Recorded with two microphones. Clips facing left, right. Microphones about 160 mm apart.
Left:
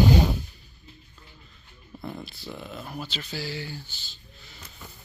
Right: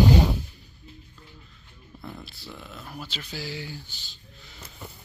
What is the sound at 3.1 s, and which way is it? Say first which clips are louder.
Speech: right 1 dB; 10° right (ahead or behind).